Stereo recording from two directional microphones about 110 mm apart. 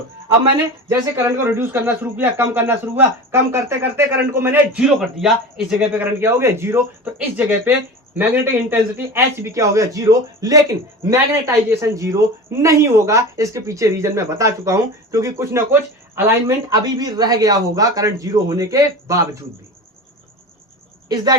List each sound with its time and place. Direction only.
0.9 s a man's voice: 20° right (ahead or behind)
4.8 s speech: 5° right (ahead or behind)
5.9 s a man's voice: 15° right (ahead or behind)
16.7 s a man's voice: 40° right (ahead or behind)
21.1 s a man's voice: 35° right (ahead or behind)